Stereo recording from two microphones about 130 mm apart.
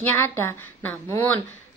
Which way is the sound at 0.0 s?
15° left (ahead or behind).